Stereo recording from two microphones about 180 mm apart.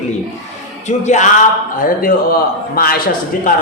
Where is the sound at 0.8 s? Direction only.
40° left (ahead or behind).